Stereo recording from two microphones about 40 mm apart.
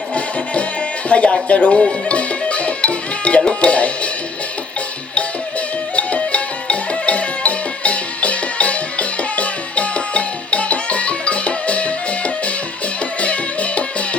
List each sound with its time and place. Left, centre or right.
0.1 s music: left
6.0 s music: left